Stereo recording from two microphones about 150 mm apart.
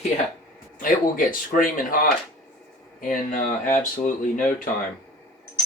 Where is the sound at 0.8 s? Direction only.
65° left (ahead or behind).